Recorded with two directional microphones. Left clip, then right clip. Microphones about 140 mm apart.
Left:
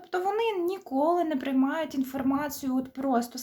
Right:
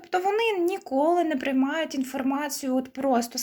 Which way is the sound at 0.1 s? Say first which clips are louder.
Right 3 dB; 25° right (ahead or behind).